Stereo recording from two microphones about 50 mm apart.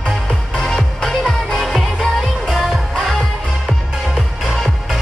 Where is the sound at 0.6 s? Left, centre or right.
Centre.